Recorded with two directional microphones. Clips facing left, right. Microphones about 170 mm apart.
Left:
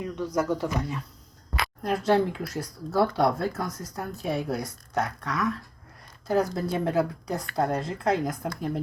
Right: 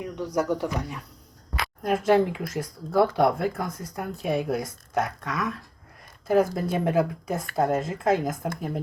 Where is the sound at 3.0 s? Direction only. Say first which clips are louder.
Right 2 dB; 15° right (ahead or behind).